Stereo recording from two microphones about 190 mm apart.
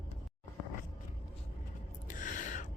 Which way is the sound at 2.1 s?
45° left (ahead or behind).